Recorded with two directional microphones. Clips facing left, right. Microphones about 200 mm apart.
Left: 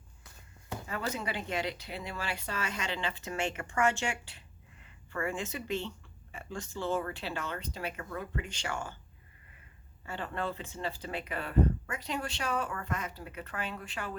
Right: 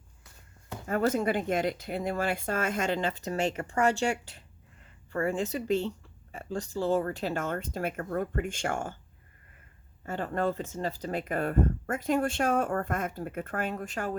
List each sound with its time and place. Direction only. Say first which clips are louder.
0.9 s speech: right 10 dB; 50° right (ahead or behind)
10.1 s speech: right 7 dB; 45° right (ahead or behind)